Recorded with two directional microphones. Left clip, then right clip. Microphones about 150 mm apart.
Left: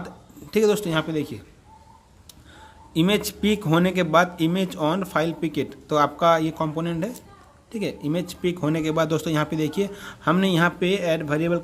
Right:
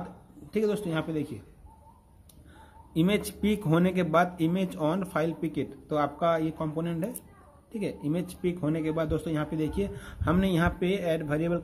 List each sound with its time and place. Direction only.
0.5 s speech: 25° left (ahead or behind)
2.9 s a man's voice: 10° left (ahead or behind)